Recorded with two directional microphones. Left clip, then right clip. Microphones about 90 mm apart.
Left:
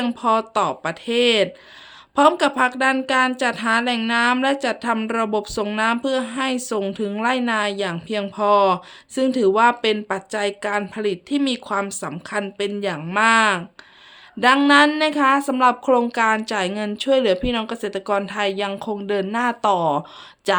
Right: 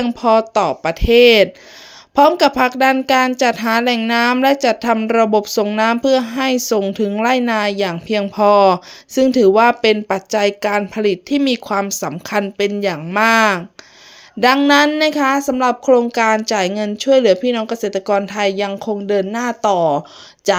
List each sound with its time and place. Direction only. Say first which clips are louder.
0.2 s speech: right 6 dB; 50° right (ahead or behind); by 1.5 s 70° right (ahead or behind)
2.1 s a woman's voice: right 5 dB; 55° right (ahead or behind)
4.4 s a woman's voice: right 7 dB; 60° right (ahead or behind)
5.7 s a woman's voice: right 6 dB; 70° right (ahead or behind)
8.4 s speech: right 5 dB; 85° right
14.4 s speech: right 3 dB; 30° right (ahead or behind)
14.9 s speech: right 2 dB; 45° right (ahead or behind); by 16.0 s 30° right (ahead or behind)
16.1 s speech: right 5 dB; 45° right (ahead or behind)